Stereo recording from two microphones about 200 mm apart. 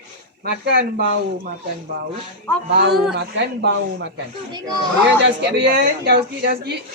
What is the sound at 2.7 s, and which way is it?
A woman's voice, 55° right (ahead or behind).